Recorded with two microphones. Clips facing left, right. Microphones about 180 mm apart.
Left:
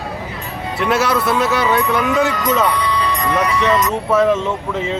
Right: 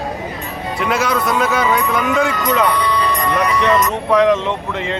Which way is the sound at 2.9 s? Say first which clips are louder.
Right 1 dB; 60° right (ahead or behind).